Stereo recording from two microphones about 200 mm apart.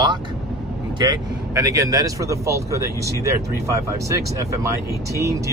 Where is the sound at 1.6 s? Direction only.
15° right (ahead or behind).